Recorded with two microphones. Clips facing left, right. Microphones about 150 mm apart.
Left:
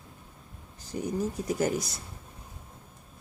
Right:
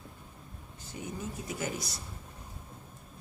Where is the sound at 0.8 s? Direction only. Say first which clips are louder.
Left 9 dB; 40° left (ahead or behind).